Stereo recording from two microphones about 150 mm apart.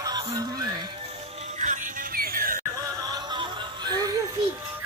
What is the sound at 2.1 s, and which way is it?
Music, 80° right.